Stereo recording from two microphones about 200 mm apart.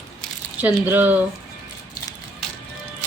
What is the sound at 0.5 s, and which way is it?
Speech, 10° right (ahead or behind).